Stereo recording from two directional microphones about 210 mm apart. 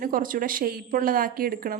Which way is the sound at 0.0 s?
40° right (ahead or behind).